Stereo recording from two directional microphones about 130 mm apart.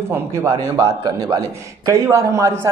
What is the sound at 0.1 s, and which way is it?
A man's voice, 20° right (ahead or behind).